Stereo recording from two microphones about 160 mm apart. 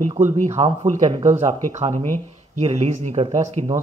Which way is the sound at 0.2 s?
45° right (ahead or behind).